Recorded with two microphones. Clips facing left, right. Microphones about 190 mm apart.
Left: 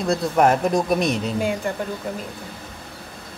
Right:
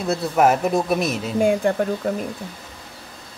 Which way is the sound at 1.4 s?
50° right (ahead or behind).